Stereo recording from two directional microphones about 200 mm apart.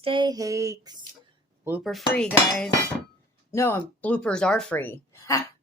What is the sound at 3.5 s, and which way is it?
Speech, 10° left (ahead or behind).